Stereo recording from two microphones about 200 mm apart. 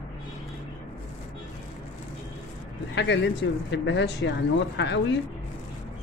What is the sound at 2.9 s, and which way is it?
Speech, 60° left (ahead or behind).